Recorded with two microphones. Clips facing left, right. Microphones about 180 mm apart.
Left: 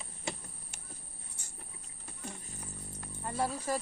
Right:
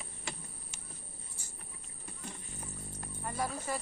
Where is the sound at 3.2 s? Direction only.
25° left (ahead or behind).